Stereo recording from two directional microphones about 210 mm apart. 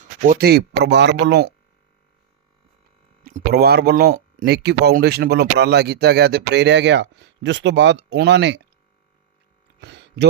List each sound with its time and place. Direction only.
0.2 s speech: 45° right (ahead or behind)
3.2 s speech: 45° right (ahead or behind)
9.8 s a sound: 55° right (ahead or behind)